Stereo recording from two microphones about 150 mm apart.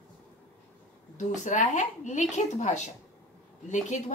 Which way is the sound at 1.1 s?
55° left (ahead or behind).